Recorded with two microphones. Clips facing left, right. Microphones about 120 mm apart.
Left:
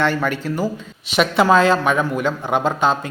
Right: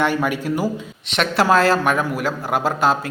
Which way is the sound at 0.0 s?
10° right (ahead or behind).